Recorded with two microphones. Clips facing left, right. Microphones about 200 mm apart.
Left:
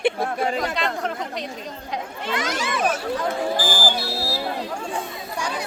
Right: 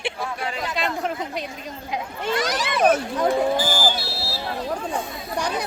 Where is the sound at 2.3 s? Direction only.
35° right (ahead or behind).